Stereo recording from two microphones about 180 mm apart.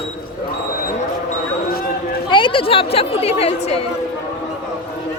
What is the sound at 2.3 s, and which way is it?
A woman's voice, 25° left (ahead or behind).